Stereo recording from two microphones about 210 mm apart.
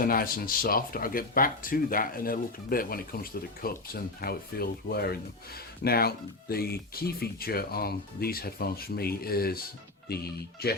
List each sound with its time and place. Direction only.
0.0 s speech: 45° left (ahead or behind)